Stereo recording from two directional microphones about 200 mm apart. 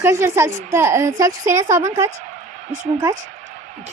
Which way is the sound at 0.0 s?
15° right (ahead or behind).